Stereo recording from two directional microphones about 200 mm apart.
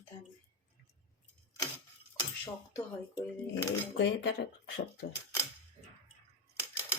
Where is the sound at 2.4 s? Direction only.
10° left (ahead or behind).